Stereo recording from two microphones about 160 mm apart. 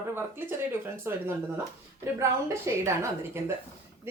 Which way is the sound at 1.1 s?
15° right (ahead or behind).